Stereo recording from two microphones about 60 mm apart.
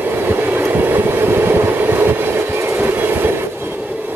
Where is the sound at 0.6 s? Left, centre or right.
Right.